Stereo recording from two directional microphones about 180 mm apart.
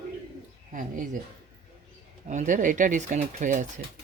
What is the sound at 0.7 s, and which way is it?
Speech, 45° right (ahead or behind).